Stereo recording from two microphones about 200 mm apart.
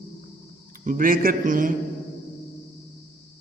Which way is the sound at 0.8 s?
45° right (ahead or behind).